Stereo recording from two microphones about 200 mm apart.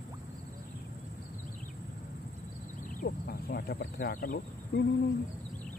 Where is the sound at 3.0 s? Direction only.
50° left (ahead or behind).